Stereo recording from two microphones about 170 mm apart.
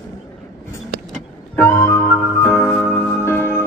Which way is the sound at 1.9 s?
Centre (ahead or behind).